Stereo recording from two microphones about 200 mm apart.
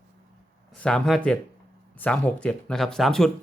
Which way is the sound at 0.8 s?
5° left (ahead or behind).